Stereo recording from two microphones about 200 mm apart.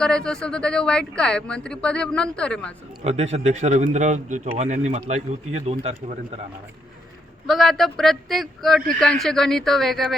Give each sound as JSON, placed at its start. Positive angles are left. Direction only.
{"t": 0.0, "sound": "speech", "side_deg": 5}
{"t": 3.0, "sound": "speech", "side_deg": -35}
{"t": 7.4, "sound": "speech", "side_deg": 0}